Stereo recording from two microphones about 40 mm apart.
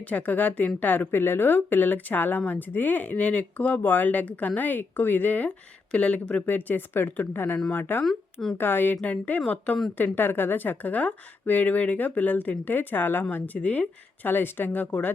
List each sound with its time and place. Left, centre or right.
0.0 s a woman's voice: left
1.1 s speech: left
3.2 s speech: left
5.5 s speech: left
6.4 s speech: left
8.0 s speech: centre
8.5 s speech: left
9.0 s a woman's voice: left
10.0 s speech: left
13.6 s a woman's voice: left
14.3 s speech: left